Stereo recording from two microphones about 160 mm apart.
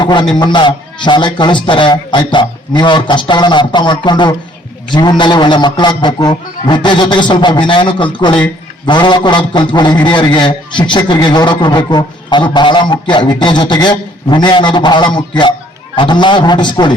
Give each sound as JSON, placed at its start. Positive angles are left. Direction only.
{"t": 0.0, "sound": "a man's voice", "side_deg": 30}